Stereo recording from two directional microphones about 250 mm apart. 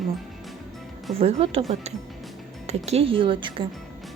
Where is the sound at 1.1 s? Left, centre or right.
Right.